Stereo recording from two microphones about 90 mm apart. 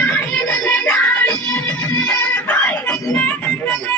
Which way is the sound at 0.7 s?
10° left (ahead or behind).